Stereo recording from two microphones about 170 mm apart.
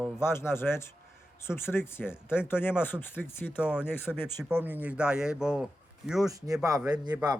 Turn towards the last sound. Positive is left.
turn(degrees=-25)  # may be behind; listen again after turning